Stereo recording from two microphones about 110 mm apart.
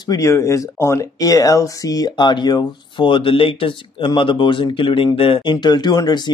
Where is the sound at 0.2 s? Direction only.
25° left (ahead or behind).